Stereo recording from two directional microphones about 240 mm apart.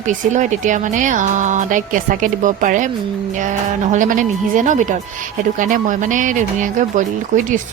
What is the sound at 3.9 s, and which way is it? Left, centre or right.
A woman's voice, right.